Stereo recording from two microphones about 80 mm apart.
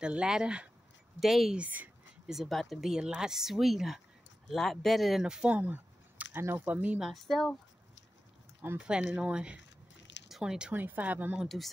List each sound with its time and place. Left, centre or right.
0.0 s speech: centre
1.6 s speech: right
2.2 s speech: centre
5.2 s speech: centre
7.0 s speech: centre
8.7 s speech: centre
10.7 s speech: right
11.4 s speech: centre